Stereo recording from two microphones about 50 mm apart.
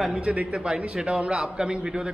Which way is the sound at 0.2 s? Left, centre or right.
Right.